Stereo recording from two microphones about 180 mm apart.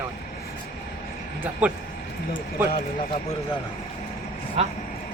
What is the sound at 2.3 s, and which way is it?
Speech, 50° left (ahead or behind).